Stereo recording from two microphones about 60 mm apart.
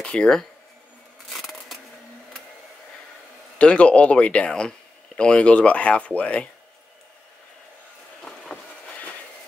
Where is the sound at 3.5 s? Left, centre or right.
Left.